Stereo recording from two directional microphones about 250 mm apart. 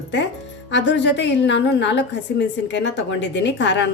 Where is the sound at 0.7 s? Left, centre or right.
Left.